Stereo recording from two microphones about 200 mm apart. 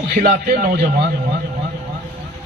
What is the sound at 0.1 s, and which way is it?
Speech, 40° right (ahead or behind).